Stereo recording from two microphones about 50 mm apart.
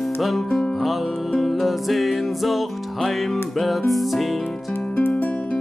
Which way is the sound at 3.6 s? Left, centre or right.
Centre.